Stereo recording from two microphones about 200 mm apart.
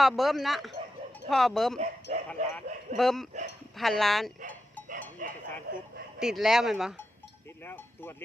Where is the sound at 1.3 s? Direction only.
Centre (ahead or behind).